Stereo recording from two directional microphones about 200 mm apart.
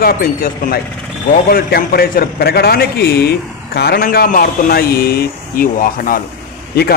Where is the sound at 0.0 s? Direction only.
45° left (ahead or behind).